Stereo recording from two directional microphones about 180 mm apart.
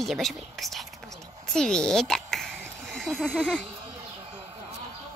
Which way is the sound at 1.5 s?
5° left (ahead or behind).